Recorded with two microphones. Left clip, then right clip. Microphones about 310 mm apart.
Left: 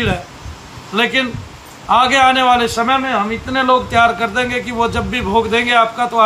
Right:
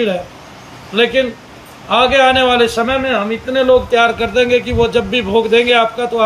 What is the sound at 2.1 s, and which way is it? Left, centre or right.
A man's voice, left.